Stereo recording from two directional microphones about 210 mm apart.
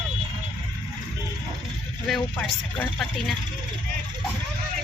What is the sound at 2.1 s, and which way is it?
Speech, centre (ahead or behind).